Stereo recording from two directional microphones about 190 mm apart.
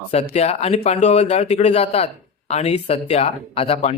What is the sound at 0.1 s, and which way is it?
Speech, 35° left (ahead or behind).